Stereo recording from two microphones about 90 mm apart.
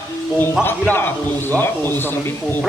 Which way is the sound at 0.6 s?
25° left (ahead or behind).